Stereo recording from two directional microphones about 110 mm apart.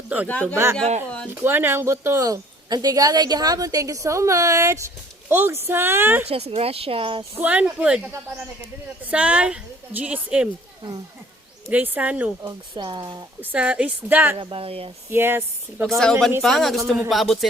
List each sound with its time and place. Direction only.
0.3 s speech: 10° left (ahead or behind)
0.5 s speech: 25° right (ahead or behind)
6.2 s speech: 70° right (ahead or behind)
7.3 s a woman's voice: 15° right (ahead or behind)
11.7 s a woman's voice: 15° right (ahead or behind)
12.4 s speech: 40° right (ahead or behind)
13.4 s a woman's voice: 10° right (ahead or behind)
14.3 s speech: 55° right (ahead or behind)
15.1 s speech: 20° right (ahead or behind)
16.4 s a man's voice: centre (ahead or behind)